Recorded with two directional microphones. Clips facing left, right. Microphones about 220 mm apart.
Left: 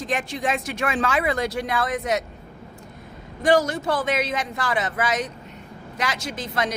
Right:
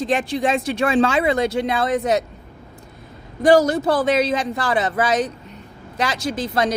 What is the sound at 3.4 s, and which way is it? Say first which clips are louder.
A woman's voice: right 5 dB; 35° right (ahead or behind).